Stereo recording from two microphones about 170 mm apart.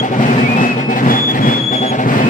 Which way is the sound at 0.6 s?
50° left (ahead or behind).